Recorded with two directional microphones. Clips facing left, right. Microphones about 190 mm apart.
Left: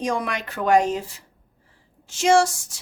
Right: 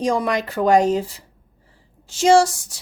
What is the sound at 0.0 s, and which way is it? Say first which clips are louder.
Speech: right 5 dB; 35° right (ahead or behind).